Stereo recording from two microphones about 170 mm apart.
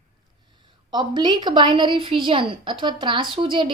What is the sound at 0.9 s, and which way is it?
A woman's voice, 25° right (ahead or behind).